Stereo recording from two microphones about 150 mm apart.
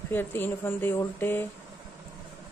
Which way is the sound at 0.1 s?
15° left (ahead or behind).